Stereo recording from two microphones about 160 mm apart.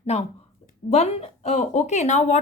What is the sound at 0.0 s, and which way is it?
A woman's voice, 40° left (ahead or behind).